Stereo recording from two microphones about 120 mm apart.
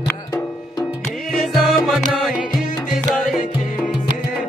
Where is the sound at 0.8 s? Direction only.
5° right (ahead or behind).